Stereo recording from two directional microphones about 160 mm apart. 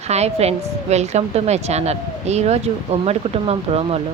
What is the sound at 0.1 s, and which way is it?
A woman's voice, 40° right (ahead or behind).